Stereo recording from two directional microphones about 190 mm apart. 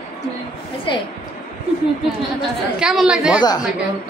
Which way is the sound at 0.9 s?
25° left (ahead or behind).